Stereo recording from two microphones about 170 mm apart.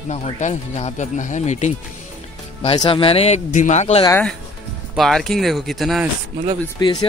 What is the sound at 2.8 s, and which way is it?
Speech, 30° left (ahead or behind).